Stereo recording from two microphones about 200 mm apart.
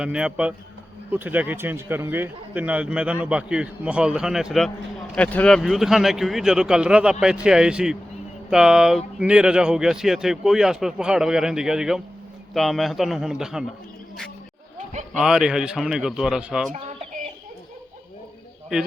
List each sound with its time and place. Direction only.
0.0 s a man's voice: 5° right (ahead or behind)
15.2 s speech: 5° right (ahead or behind)
16.7 s chicken: 35° right (ahead or behind)